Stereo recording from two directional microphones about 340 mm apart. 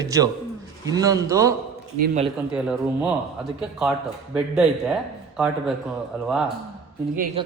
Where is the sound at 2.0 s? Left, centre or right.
Right.